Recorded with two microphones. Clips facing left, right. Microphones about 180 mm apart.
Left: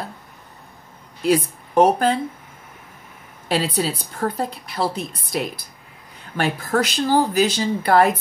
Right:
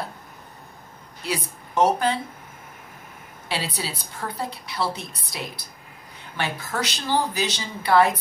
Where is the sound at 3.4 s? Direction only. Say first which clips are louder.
Left 8 dB; 45° left (ahead or behind).